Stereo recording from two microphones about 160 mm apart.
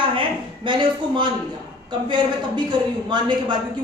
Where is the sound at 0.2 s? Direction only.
30° right (ahead or behind).